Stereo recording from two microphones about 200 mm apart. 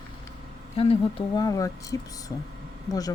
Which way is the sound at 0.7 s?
25° left (ahead or behind).